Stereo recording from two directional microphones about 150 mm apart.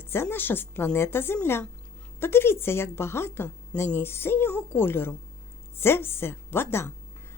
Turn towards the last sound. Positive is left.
turn(degrees=15)  # may be behind; listen again after turning